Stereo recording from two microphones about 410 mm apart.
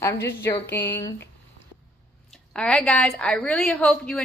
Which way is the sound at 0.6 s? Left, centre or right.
Left.